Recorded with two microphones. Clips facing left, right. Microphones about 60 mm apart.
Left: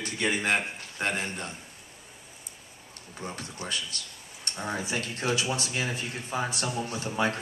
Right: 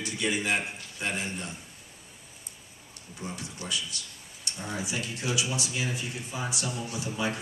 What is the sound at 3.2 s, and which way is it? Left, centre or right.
Speech, left.